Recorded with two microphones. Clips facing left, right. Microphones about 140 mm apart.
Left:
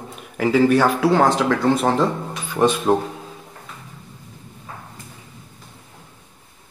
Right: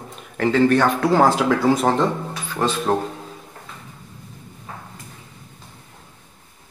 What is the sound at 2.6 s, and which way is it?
Speech, 15° left (ahead or behind).